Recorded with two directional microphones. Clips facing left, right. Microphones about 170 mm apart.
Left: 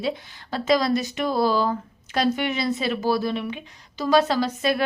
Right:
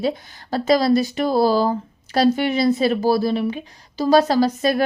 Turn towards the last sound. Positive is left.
turn(degrees=-40)  # may be behind; listen again after turning